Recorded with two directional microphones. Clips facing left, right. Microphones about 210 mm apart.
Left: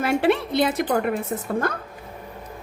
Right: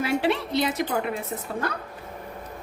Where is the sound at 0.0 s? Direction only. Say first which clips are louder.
Left 4 dB; 50° left (ahead or behind).